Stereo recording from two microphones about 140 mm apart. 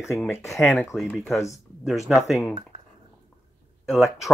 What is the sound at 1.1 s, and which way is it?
Speech, centre (ahead or behind).